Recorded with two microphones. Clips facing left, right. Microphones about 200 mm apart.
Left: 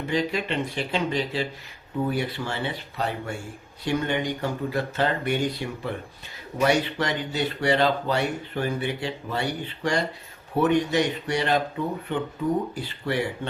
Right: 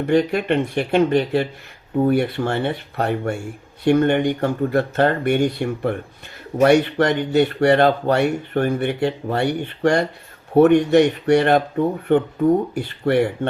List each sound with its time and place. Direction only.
0.0 s speech: 60° right (ahead or behind)